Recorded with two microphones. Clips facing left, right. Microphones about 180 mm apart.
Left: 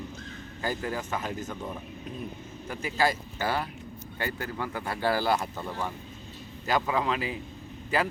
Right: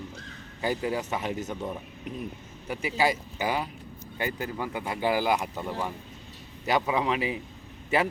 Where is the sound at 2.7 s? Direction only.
15° right (ahead or behind).